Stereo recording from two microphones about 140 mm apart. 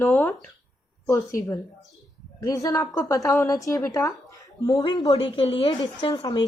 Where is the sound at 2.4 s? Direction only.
20° left (ahead or behind).